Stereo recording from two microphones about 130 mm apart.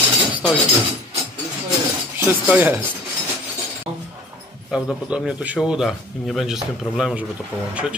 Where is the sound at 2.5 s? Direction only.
15° right (ahead or behind).